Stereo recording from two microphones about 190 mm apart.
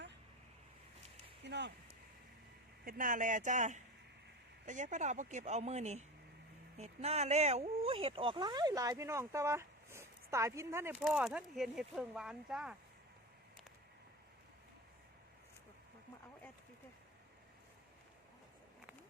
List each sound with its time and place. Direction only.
1.5 s a sound: 65° right (ahead or behind)
2.8 s speech: 45° right (ahead or behind); by 11.0 s 10° right (ahead or behind)
11.0 s speech: centre (ahead or behind)